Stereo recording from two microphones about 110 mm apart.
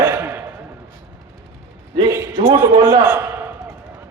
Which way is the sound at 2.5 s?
20° right (ahead or behind).